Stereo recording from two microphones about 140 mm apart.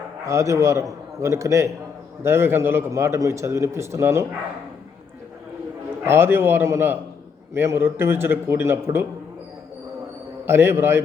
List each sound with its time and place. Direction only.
0.3 s a man's voice: 20° right (ahead or behind)
6.1 s a man's voice: 15° right (ahead or behind)
10.4 s a man's voice: 15° right (ahead or behind)